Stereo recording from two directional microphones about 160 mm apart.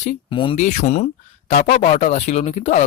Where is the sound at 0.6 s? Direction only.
50° left (ahead or behind).